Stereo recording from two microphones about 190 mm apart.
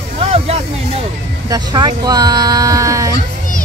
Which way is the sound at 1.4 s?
20° right (ahead or behind).